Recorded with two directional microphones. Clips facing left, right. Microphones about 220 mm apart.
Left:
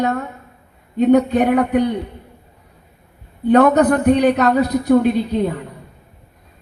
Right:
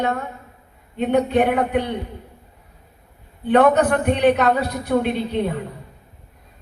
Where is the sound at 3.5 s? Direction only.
40° left (ahead or behind).